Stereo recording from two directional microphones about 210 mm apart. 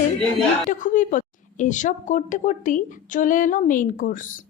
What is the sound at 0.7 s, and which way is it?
Speech, 40° left (ahead or behind).